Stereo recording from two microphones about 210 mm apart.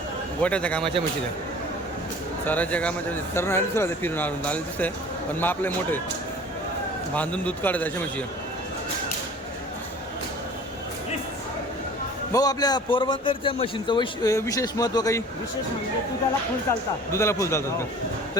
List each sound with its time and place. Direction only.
0.4 s a man's voice: 5° left (ahead or behind)
2.5 s speech: 5° left (ahead or behind)
7.1 s speech: 5° left (ahead or behind)
12.3 s a man's voice: 20° left (ahead or behind)
17.1 s speech: 15° left (ahead or behind)